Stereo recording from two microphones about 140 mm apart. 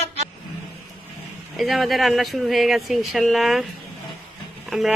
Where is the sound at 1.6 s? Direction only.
Centre (ahead or behind).